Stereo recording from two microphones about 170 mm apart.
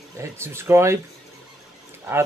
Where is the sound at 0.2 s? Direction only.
15° right (ahead or behind).